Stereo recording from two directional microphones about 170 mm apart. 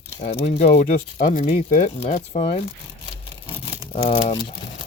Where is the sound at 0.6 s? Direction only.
40° left (ahead or behind).